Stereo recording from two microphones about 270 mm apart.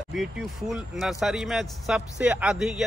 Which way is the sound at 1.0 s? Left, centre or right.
Centre.